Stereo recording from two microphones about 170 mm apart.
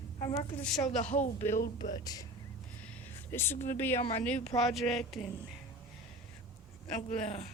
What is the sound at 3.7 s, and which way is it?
A woman's voice, 15° left (ahead or behind).